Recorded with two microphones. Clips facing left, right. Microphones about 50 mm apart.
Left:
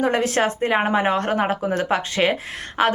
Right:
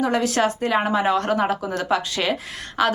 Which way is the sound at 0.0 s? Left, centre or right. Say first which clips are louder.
Left 1 dB; left.